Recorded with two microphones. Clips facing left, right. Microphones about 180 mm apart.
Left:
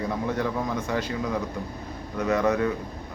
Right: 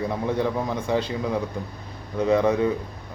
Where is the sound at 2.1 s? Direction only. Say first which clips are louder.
Right 3 dB; 30° right (ahead or behind).